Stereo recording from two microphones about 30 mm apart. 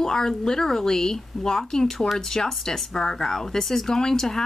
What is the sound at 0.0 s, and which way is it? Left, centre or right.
Speech, centre.